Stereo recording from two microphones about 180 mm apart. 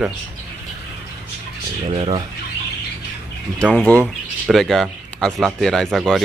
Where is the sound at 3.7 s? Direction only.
10° left (ahead or behind).